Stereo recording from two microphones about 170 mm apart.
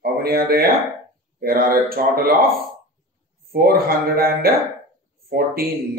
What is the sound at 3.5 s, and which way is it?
Speech, 60° right (ahead or behind).